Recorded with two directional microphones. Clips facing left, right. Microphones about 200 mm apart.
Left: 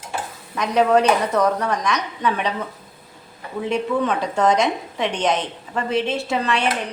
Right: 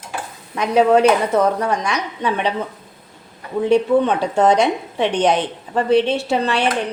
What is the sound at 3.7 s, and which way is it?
A woman's voice, 30° right (ahead or behind).